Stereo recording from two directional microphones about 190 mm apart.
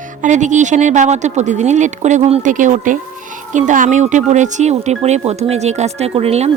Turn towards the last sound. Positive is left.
turn(degrees=-35)  # may be behind; listen again after turning